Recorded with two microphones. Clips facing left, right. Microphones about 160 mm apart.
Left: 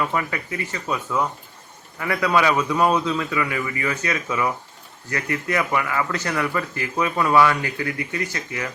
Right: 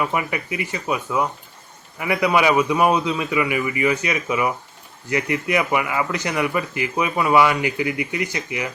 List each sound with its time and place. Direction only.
0.0 s speech: 15° right (ahead or behind)